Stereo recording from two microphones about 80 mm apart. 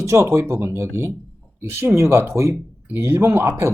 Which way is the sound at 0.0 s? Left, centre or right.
Right.